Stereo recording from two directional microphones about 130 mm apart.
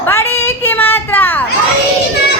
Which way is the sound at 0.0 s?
15° left (ahead or behind).